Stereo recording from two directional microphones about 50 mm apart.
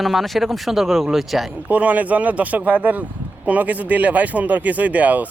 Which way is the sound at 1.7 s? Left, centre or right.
Right.